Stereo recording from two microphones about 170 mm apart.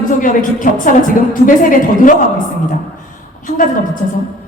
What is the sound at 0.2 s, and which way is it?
A woman's voice, 50° left (ahead or behind).